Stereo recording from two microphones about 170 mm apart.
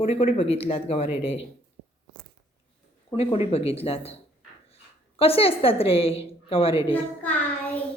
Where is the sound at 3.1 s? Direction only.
35° left (ahead or behind).